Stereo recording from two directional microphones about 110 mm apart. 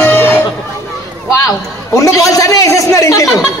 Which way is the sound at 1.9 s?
30° left (ahead or behind).